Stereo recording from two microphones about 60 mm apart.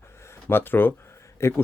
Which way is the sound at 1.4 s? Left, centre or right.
Left.